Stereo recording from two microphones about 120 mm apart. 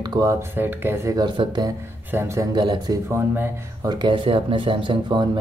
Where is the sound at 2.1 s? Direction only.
20° right (ahead or behind).